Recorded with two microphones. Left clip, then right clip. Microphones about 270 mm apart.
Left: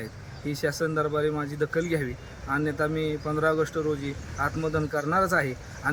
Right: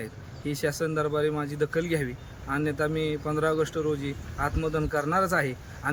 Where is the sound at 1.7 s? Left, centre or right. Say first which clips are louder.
Left 1 dB; centre.